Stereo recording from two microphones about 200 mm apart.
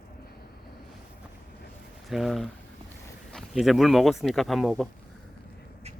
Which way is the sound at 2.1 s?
Centre (ahead or behind).